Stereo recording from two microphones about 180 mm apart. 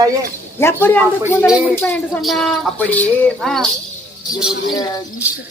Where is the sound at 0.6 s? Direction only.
15° left (ahead or behind).